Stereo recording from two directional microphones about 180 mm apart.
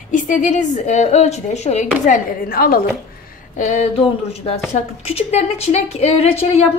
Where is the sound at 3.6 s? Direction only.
35° left (ahead or behind).